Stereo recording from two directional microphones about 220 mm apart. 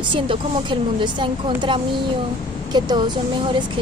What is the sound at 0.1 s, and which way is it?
A woman's voice, 20° right (ahead or behind).